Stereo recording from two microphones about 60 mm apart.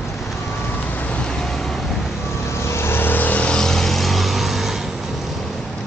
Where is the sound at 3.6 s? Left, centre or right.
Centre.